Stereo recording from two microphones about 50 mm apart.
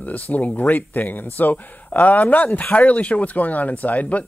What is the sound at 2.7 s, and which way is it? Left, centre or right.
Speech, left.